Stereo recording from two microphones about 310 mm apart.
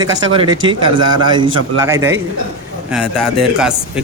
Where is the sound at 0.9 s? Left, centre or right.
Right.